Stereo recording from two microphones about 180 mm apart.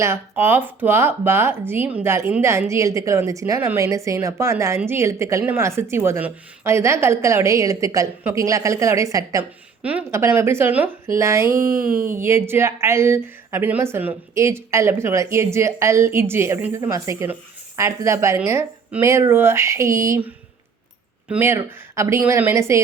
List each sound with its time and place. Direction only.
0.0 s a woman's voice: 15° right (ahead or behind)
11.5 s speech: 50° right (ahead or behind)
12.1 s a woman's voice: 15° right (ahead or behind)